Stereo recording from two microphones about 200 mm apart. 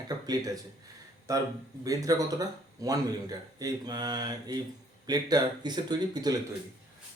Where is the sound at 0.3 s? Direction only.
20° right (ahead or behind).